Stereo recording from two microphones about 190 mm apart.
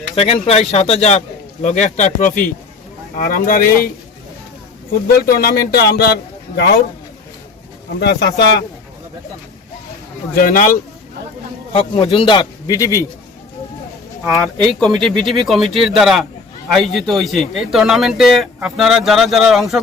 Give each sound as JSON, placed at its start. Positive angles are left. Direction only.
{"t": 0.2, "sound": "speech", "side_deg": 30}
{"t": 5.2, "sound": "speech", "side_deg": 55}
{"t": 7.9, "sound": "speech", "side_deg": 60}
{"t": 10.3, "sound": "speech", "side_deg": 45}
{"t": 11.7, "sound": "a man's voice", "side_deg": 30}
{"t": 14.3, "sound": "a man's voice", "side_deg": 0}